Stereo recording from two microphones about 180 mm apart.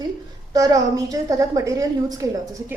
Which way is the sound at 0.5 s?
20° right (ahead or behind).